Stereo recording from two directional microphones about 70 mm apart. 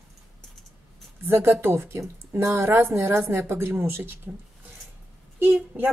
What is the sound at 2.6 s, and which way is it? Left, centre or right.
Speech, right.